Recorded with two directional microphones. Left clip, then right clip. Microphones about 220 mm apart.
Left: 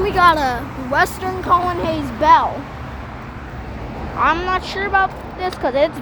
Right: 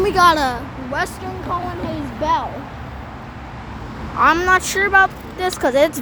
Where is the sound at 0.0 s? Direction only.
35° right (ahead or behind).